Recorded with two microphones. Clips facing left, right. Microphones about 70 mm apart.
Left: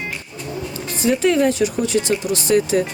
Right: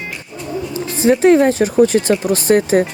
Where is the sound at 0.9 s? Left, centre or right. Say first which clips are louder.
Right 6 dB; right.